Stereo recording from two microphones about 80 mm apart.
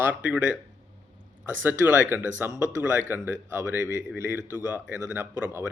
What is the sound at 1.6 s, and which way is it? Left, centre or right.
A man's voice, right.